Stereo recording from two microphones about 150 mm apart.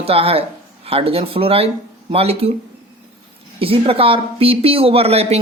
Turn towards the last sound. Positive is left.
turn(degrees=-45)  # may be behind; listen again after turning